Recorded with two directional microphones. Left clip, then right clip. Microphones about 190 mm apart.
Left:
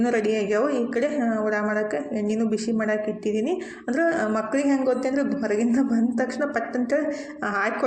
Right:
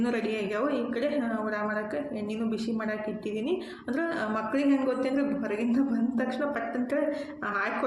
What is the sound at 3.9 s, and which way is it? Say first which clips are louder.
Speech: left 7 dB; 30° left (ahead or behind).